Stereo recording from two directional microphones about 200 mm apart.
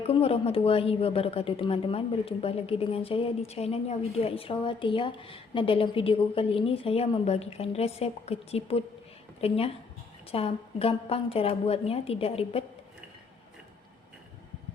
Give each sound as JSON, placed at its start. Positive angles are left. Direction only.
{"t": 0.1, "sound": "a woman's voice", "side_deg": 30}